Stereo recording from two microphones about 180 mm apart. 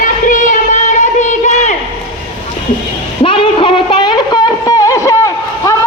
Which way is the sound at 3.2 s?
30° left (ahead or behind).